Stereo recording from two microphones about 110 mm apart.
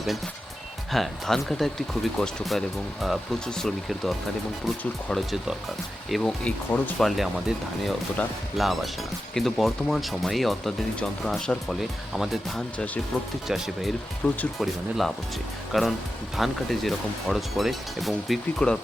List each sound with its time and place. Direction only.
0.9 s speech: centre (ahead or behind)
5.1 s speech: centre (ahead or behind)
6.4 s speech: 15° left (ahead or behind)
7.0 s speech: centre (ahead or behind)
14.2 s speech: 15° left (ahead or behind)
14.6 s speech: centre (ahead or behind)